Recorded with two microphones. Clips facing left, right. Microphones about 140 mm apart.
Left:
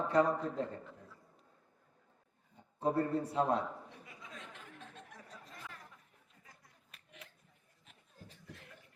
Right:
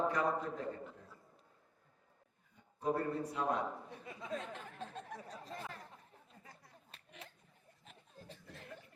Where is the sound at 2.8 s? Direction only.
30° left (ahead or behind).